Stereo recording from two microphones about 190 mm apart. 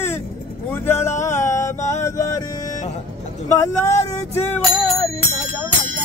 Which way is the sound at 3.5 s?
15° left (ahead or behind).